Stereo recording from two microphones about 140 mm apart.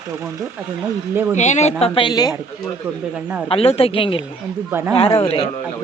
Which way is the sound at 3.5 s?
45° left (ahead or behind).